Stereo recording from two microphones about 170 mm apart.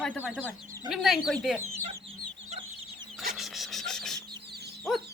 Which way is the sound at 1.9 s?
35° right (ahead or behind).